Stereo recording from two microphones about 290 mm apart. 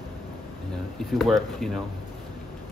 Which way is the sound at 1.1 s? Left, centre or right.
Centre.